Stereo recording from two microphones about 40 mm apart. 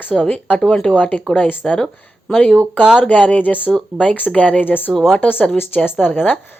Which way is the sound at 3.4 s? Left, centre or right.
Left.